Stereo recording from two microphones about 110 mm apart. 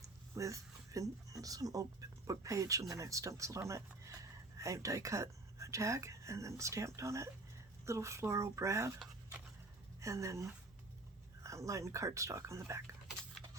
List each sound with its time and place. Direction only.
0.0 s speech: 30° right (ahead or behind)
10.0 s speech: 30° right (ahead or behind)